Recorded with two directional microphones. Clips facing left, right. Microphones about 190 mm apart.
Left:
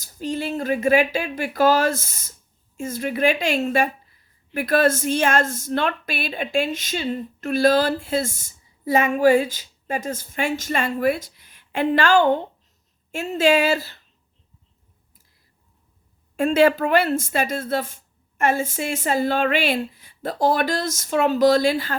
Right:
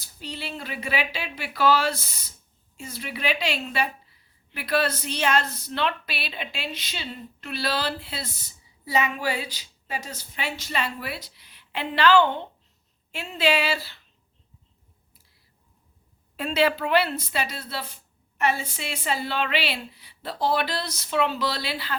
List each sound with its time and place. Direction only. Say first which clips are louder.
0.0 s a woman's voice: left 10 dB; 45° left (ahead or behind)
16.4 s a woman's voice: left 7 dB; 50° left (ahead or behind)